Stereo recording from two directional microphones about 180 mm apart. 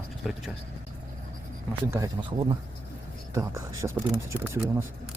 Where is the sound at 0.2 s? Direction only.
Centre (ahead or behind).